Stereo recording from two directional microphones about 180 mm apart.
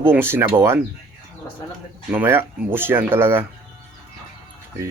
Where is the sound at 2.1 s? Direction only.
10° right (ahead or behind).